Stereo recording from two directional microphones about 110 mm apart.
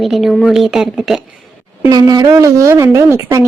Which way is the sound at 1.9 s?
35° right (ahead or behind).